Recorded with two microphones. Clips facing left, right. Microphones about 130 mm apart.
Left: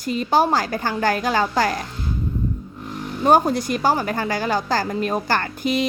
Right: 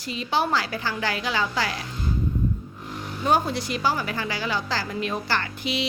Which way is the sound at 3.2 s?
45° left (ahead or behind).